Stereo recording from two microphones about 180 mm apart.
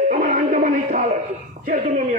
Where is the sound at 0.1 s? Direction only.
45° right (ahead or behind).